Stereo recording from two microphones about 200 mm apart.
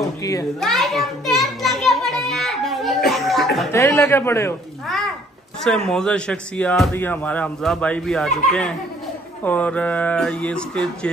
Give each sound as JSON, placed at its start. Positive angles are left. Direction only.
{"t": 0.2, "sound": "a child's voice", "side_deg": 15}
{"t": 0.6, "sound": "children playing", "side_deg": 0}
{"t": 3.7, "sound": "speech", "side_deg": 15}
{"t": 5.9, "sound": "speech", "side_deg": 5}